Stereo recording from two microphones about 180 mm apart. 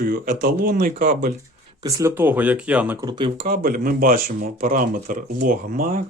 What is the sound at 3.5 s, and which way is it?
Speech, 50° right (ahead or behind).